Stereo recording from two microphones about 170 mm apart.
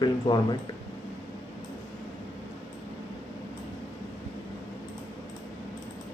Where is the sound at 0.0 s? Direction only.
25° left (ahead or behind).